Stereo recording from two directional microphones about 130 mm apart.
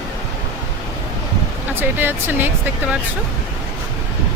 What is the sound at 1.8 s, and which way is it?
Speech, 15° right (ahead or behind).